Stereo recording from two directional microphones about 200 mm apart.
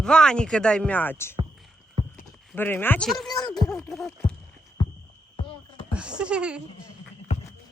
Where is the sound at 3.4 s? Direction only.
Centre (ahead or behind).